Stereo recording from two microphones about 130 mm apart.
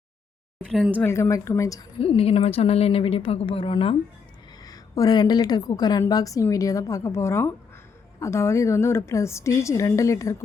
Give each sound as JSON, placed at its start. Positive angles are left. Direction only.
{"t": 0.9, "sound": "a woman's voice", "side_deg": 20}
{"t": 2.0, "sound": "a woman's voice", "side_deg": 45}
{"t": 4.6, "sound": "a woman's voice", "side_deg": 30}